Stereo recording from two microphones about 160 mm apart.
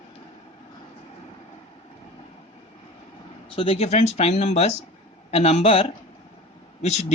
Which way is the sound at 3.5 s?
35° left (ahead or behind).